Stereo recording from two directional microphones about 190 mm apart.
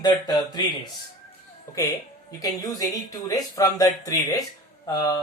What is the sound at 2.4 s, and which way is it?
Speech, 20° left (ahead or behind).